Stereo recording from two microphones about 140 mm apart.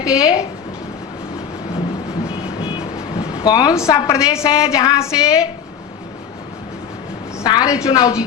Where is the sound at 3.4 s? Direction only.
30° left (ahead or behind).